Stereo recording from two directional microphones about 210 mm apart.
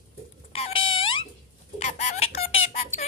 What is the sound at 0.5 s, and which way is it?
Frog, 25° left (ahead or behind).